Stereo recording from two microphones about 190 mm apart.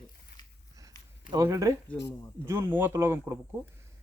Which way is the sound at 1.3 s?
15° right (ahead or behind).